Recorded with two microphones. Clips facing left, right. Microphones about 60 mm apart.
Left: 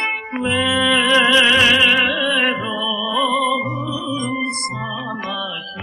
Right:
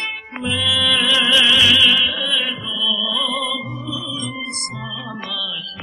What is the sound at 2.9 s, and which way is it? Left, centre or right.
Music, left.